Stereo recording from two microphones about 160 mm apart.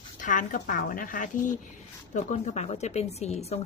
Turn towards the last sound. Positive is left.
turn(degrees=40)  # may be behind; listen again after turning